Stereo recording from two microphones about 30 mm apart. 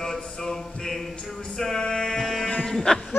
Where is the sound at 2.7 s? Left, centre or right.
Centre.